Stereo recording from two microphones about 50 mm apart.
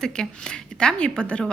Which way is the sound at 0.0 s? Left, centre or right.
Centre.